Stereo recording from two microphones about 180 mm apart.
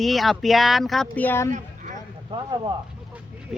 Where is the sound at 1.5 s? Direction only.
45° right (ahead or behind).